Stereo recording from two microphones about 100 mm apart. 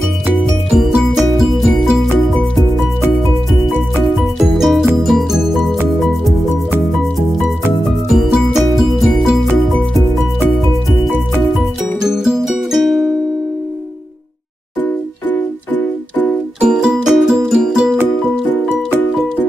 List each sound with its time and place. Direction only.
0.4 s music: centre (ahead or behind)
3.9 s music: 5° right (ahead or behind)
8.1 s music: 5° right (ahead or behind)
12.0 s music: 5° right (ahead or behind)
15.3 s music: 15° left (ahead or behind)
16.6 s music: 10° right (ahead or behind)